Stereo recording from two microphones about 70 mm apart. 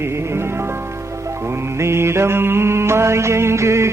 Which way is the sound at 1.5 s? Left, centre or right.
Right.